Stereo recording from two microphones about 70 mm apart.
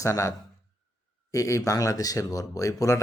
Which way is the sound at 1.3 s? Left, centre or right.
Left.